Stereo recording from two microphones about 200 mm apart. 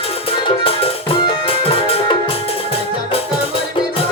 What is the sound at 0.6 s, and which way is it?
Music, 30° left (ahead or behind).